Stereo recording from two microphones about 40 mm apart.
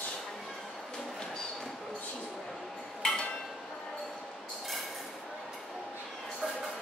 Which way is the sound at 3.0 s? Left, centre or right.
Centre.